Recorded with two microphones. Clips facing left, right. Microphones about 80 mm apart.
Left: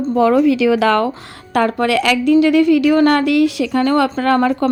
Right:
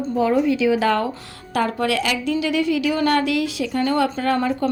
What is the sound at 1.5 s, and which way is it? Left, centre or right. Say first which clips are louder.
A woman's voice: left 6 dB; left.